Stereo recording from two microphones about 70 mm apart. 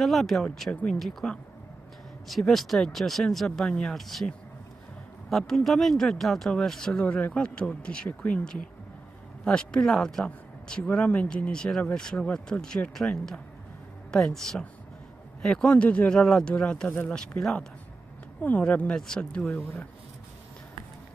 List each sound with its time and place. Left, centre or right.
0.0 s speech: centre; by 8.4 s left
9.4 s speech: centre
16.1 s speech: centre
18.6 s speech: centre